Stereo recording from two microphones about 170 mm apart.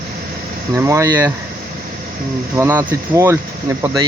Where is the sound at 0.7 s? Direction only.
20° right (ahead or behind).